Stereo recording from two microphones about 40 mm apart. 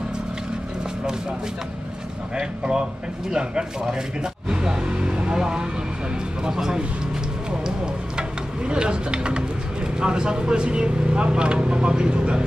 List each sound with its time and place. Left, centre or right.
2.3 s speech: centre